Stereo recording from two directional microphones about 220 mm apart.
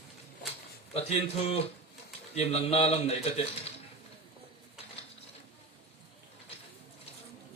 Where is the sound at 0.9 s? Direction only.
30° left (ahead or behind).